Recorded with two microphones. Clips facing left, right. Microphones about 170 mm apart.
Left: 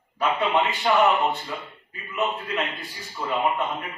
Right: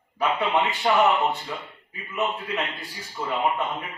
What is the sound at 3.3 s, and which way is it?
Speech, centre (ahead or behind).